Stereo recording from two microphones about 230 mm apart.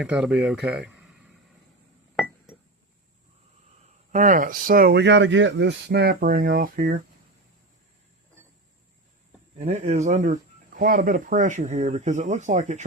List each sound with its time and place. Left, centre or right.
0.0 s speech: centre
4.1 s speech: right
9.6 s speech: right